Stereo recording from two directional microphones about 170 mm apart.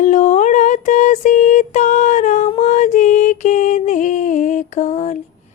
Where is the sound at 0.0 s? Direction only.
45° left (ahead or behind).